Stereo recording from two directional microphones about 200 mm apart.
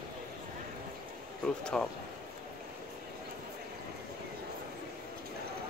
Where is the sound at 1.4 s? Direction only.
5° left (ahead or behind).